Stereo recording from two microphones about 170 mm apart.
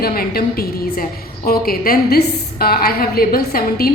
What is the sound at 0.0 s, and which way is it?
A woman's voice, 65° left (ahead or behind).